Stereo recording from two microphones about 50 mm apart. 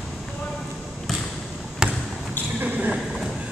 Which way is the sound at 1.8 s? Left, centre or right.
Centre.